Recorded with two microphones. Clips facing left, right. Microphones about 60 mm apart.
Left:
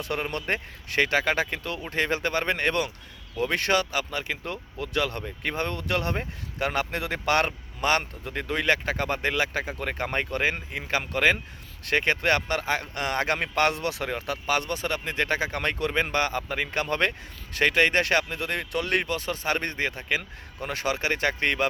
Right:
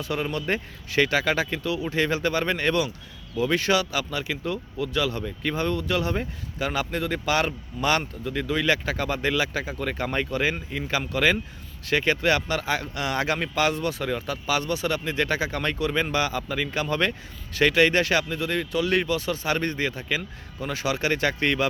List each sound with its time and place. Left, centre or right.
0.0 s speech: left
0.4 s speech: left
1.6 s speech: left
5.2 s speech: left
5.8 s speech: left
7.8 s speech: left
13.6 s speech: left
14.1 s speech: left
17.6 s speech: left
20.9 s speech: left